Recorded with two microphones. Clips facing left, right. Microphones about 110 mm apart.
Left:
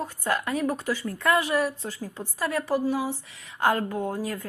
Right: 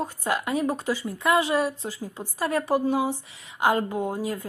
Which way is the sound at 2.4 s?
30° right (ahead or behind).